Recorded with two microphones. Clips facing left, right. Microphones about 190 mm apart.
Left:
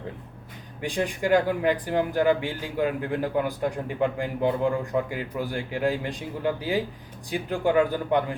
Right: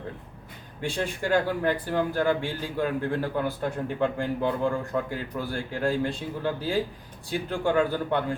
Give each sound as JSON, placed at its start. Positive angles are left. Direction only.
{"t": 0.8, "sound": "speech", "side_deg": 15}